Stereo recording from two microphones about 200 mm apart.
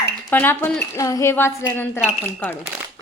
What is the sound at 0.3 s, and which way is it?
A woman's voice, 10° left (ahead or behind).